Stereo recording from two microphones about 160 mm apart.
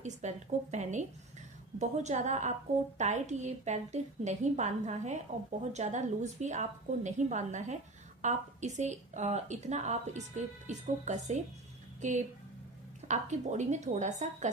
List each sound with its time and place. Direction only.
0.0 s a woman's voice: 45° right (ahead or behind)